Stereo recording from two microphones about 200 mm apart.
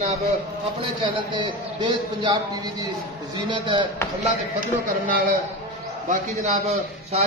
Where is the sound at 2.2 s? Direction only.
20° right (ahead or behind).